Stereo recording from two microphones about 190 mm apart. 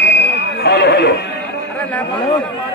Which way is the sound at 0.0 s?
65° left (ahead or behind).